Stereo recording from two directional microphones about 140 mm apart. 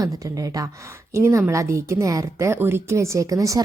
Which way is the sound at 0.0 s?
25° right (ahead or behind).